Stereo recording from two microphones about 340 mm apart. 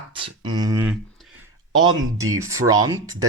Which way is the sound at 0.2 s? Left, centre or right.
Centre.